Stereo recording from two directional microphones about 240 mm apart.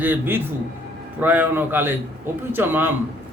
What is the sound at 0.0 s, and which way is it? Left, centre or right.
A man's voice, centre.